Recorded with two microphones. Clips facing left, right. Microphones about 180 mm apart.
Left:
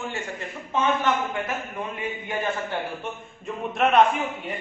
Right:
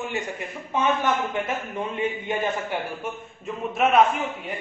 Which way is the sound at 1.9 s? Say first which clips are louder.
Right 5 dB; 20° right (ahead or behind).